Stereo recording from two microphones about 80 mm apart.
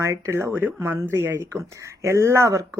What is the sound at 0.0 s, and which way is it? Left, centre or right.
Speech, right.